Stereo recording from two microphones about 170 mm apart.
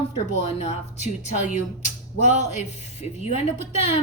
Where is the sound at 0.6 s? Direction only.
40° left (ahead or behind).